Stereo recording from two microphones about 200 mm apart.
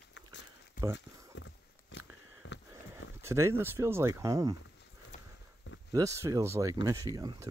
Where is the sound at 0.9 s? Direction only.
65° left (ahead or behind).